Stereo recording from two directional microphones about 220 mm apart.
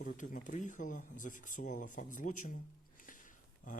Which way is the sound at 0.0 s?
35° left (ahead or behind).